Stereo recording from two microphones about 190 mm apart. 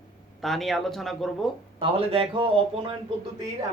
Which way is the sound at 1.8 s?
30° right (ahead or behind).